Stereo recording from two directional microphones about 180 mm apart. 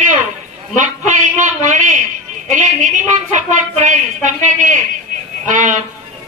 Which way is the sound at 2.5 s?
45° right (ahead or behind).